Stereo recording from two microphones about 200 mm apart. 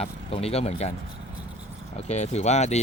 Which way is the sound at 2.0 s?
35° left (ahead or behind).